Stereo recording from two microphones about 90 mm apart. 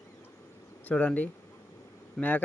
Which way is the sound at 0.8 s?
15° left (ahead or behind).